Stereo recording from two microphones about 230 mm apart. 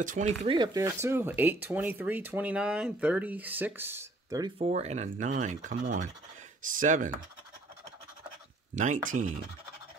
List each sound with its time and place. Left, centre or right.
0.0 s speech: right
0.5 s speech: centre
4.6 s speech: right
8.7 s speech: right